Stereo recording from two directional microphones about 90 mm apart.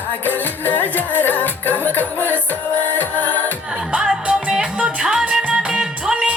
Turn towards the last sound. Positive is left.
turn(degrees=-5)  # may be behind; listen again after turning